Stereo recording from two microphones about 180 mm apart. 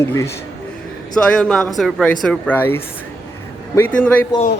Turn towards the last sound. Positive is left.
turn(degrees=10)  # may be behind; listen again after turning